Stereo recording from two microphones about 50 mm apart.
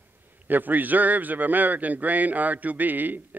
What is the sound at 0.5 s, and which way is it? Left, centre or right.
A man's voice, right.